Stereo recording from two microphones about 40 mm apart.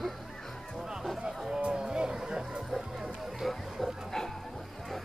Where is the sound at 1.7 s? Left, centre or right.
Centre.